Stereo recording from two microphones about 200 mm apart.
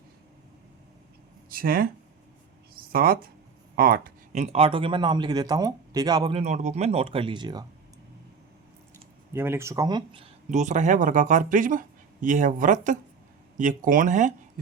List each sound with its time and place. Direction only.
1.5 s speech: 45° right (ahead or behind)
2.7 s a sound: 45° right (ahead or behind)
3.8 s speech: 45° right (ahead or behind); by 6.4 s 20° right (ahead or behind)
6.4 s speech: 35° right (ahead or behind); by 7.7 s 20° right (ahead or behind)
9.3 s speech: 10° right (ahead or behind)
10.5 s speech: 35° right (ahead or behind)